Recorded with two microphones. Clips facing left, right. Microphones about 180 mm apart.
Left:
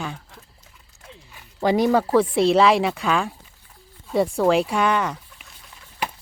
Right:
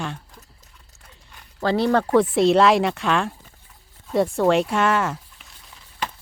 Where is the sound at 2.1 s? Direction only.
Centre (ahead or behind).